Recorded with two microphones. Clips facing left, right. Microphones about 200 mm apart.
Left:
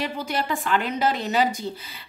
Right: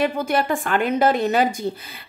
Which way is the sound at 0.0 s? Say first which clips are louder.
Right 7 dB; 55° right (ahead or behind).